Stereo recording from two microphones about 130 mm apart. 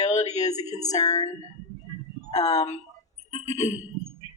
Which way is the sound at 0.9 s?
30° left (ahead or behind).